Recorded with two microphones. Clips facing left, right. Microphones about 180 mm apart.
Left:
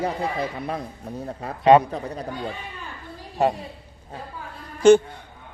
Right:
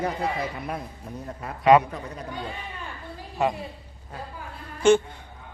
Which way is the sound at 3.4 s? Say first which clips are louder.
Left 4 dB; 35° left (ahead or behind).